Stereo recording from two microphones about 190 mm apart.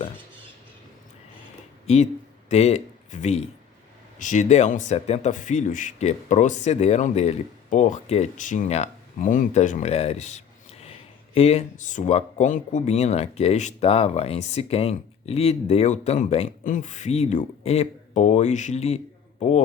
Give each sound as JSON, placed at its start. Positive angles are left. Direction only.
{"t": 2.5, "sound": "a man's voice", "side_deg": 35}